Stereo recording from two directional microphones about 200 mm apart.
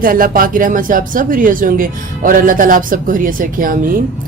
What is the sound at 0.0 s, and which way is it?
A woman's voice, 45° right (ahead or behind).